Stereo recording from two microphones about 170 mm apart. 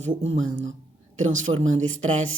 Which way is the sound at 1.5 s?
40° right (ahead or behind).